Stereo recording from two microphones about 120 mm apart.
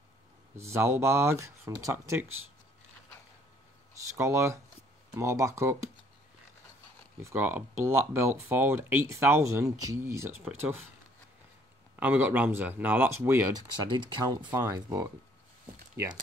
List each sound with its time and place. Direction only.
0.6 s speech: 20° right (ahead or behind)
4.1 s speech: 25° right (ahead or behind)
7.2 s speech: 20° right (ahead or behind)
12.0 s speech: 15° right (ahead or behind); by 14.5 s 40° right (ahead or behind)
14.5 s speech: 30° right (ahead or behind)